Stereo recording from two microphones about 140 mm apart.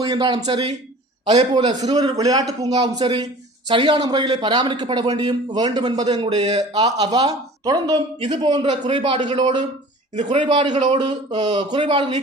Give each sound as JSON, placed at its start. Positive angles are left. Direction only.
{"t": 0.0, "sound": "a man's voice", "side_deg": -30}
{"t": 10.3, "sound": "a man's voice", "side_deg": -35}